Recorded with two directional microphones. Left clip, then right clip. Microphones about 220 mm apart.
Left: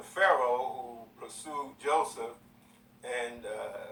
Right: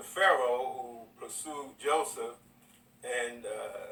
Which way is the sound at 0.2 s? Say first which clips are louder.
Even; 20° right (ahead or behind).